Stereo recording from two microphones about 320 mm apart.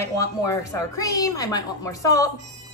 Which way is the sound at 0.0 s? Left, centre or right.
Centre.